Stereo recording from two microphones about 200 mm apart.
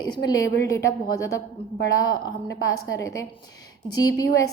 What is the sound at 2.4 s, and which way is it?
Speech, 65° left (ahead or behind).